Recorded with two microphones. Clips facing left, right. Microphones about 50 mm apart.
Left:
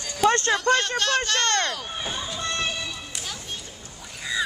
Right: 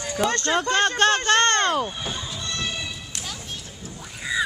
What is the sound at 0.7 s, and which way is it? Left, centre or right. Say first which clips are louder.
Speech: right 4 dB; right.